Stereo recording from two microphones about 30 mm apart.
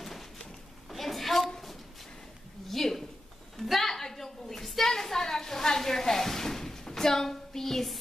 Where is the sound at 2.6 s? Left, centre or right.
Centre.